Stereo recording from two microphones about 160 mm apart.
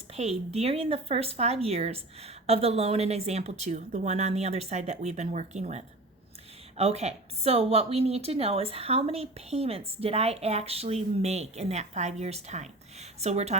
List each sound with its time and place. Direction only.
0.1 s a woman's voice: 40° right (ahead or behind)